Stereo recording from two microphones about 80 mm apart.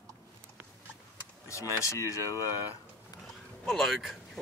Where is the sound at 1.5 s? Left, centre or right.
Left.